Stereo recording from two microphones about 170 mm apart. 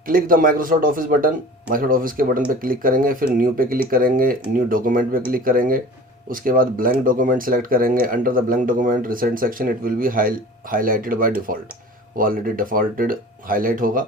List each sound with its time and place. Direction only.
0.1 s speech: 55° right (ahead or behind)